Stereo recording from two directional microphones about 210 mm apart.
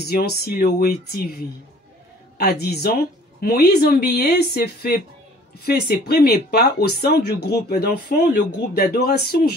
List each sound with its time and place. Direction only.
0.0 s speech: 45° left (ahead or behind)